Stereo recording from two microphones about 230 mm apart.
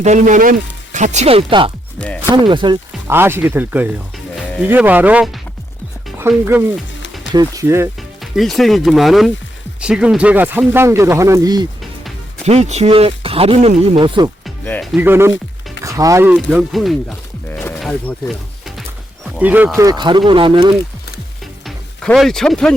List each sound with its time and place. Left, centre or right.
0.0 s speech: right
2.0 s speech: centre
2.3 s speech: right
8.2 s speech: centre
12.5 s speech: right
14.4 s music: centre
14.9 s speech: centre
16.5 s a sound: centre
19.4 s speech: centre
21.6 s music: centre